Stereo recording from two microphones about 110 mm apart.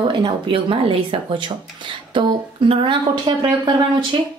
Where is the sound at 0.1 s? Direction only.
50° right (ahead or behind).